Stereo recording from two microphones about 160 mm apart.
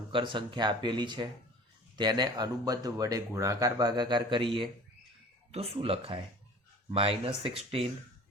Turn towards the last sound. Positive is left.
turn(degrees=-35)  # may be behind; listen again after turning